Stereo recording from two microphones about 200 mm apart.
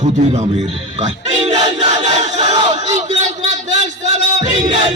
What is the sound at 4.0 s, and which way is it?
Music, 35° right (ahead or behind).